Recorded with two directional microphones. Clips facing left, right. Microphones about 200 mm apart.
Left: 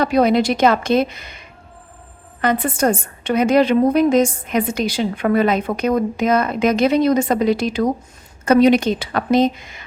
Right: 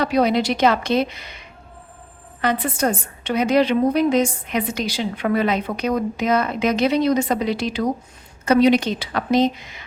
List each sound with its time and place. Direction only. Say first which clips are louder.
0.0 s a woman's voice: left 3 dB; 50° left (ahead or behind)
2.4 s a woman's voice: left 3 dB; 50° left (ahead or behind)